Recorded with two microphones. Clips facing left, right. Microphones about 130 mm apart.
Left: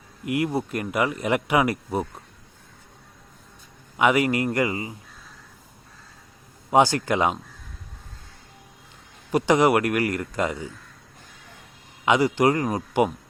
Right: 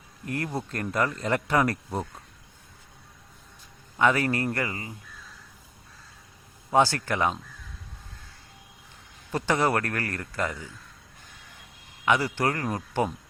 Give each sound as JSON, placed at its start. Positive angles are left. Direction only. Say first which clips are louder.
{"t": 0.3, "sound": "speech", "louder": "left 7 dB", "side_deg": 15}
{"t": 3.9, "sound": "speech", "louder": "left 3 dB", "side_deg": 15}
{"t": 6.7, "sound": "speech", "louder": "left 4 dB", "side_deg": 15}
{"t": 9.3, "sound": "speech", "louder": "left 6 dB", "side_deg": 15}
{"t": 12.0, "sound": "speech", "louder": "left 5 dB", "side_deg": 15}